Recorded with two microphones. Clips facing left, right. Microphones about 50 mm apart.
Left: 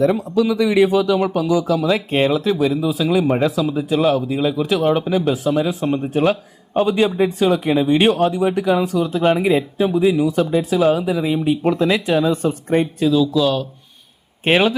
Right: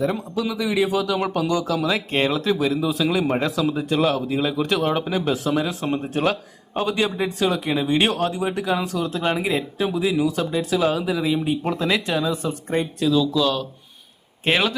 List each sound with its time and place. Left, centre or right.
0.3 s speech: centre
0.9 s a man's voice: centre
1.2 s a man's voice: centre
12.5 s a man's voice: centre
13.1 s speech: centre
14.4 s a man's voice: centre